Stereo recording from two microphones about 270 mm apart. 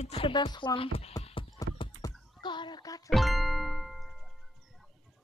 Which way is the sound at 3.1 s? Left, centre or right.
Centre.